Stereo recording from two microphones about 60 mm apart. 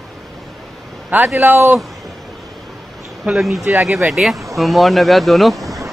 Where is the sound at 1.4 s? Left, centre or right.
Right.